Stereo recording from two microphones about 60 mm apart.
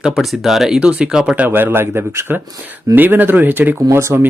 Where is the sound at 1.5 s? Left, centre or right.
Right.